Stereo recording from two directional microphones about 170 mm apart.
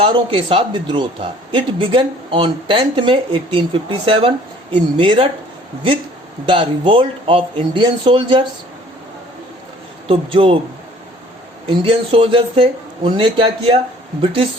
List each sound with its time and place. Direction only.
0.0 s a man's voice: 30° right (ahead or behind)
6.5 s speech: 30° right (ahead or behind)
10.1 s a man's voice: 30° right (ahead or behind)
11.7 s a man's voice: 30° right (ahead or behind)